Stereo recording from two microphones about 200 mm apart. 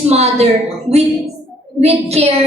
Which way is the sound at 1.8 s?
30° right (ahead or behind).